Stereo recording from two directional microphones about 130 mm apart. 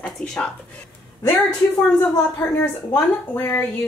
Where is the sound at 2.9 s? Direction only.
15° left (ahead or behind).